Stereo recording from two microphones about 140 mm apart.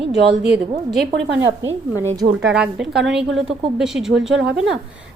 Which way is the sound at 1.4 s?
25° right (ahead or behind).